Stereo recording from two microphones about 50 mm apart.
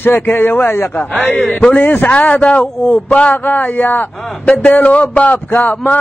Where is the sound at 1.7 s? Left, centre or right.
Left.